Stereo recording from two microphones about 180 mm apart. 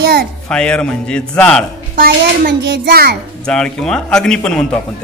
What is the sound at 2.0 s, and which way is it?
A child's voice, 60° right (ahead or behind).